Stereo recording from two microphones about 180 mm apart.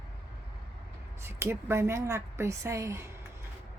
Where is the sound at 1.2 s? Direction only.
15° right (ahead or behind).